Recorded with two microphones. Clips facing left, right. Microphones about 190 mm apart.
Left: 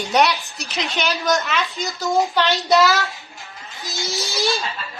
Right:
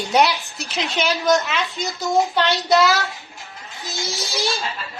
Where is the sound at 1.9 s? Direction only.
Centre (ahead or behind).